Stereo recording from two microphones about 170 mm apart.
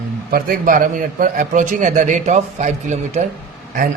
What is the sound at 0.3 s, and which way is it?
A man's voice, 55° right (ahead or behind).